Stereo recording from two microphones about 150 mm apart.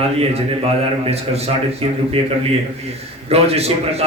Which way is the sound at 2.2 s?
40° right (ahead or behind).